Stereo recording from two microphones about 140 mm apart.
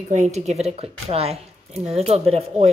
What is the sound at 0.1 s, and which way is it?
A woman's voice, 55° right (ahead or behind).